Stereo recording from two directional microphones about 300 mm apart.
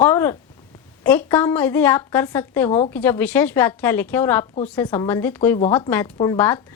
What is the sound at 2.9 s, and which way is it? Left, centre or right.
A woman's voice, centre.